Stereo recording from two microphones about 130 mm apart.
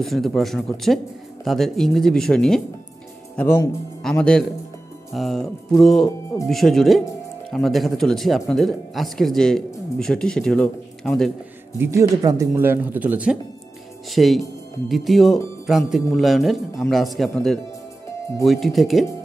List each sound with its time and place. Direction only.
0.0 s speech: centre (ahead or behind)
3.3 s speech: 15° left (ahead or behind)
11.8 s speech: 25° right (ahead or behind)
14.1 s speech: centre (ahead or behind)